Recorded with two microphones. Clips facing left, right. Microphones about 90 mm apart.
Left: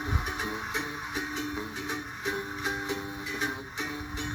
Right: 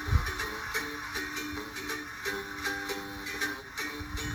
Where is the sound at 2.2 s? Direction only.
20° left (ahead or behind).